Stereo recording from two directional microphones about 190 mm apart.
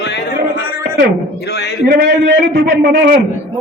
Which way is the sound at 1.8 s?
55° right (ahead or behind).